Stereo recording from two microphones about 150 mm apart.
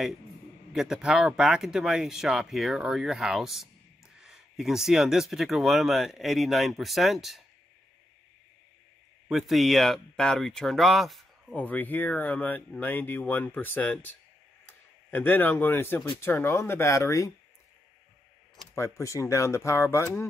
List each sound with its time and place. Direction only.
0.7 s speech: 5° right (ahead or behind)
9.3 s speech: centre (ahead or behind)
11.6 s speech: 10° left (ahead or behind)
18.8 s speech: 20° left (ahead or behind)